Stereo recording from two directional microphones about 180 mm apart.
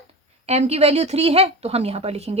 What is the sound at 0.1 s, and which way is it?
A woman's voice, 35° right (ahead or behind).